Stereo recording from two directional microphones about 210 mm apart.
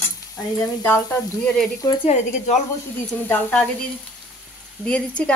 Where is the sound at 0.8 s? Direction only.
10° left (ahead or behind).